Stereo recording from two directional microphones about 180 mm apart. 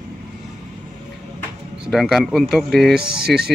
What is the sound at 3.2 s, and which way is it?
Speech, 60° right (ahead or behind).